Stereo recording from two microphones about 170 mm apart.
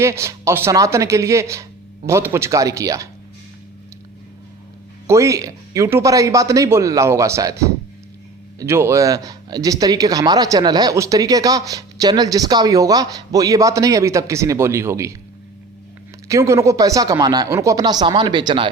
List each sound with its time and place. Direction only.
0.0 s speech: 15° right (ahead or behind)
5.0 s speech: 15° right (ahead or behind)
16.3 s speech: 15° right (ahead or behind)